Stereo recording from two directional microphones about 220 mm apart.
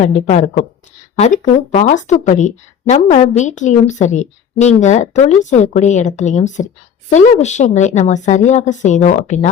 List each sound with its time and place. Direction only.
0.0 s a woman's voice: 30° left (ahead or behind)